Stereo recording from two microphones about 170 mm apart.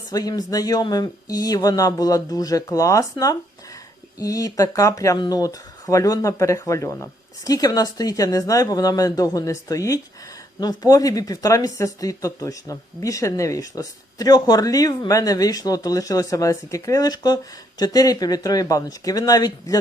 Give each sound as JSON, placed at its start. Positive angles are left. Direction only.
{"t": 0.1, "sound": "speech", "side_deg": 20}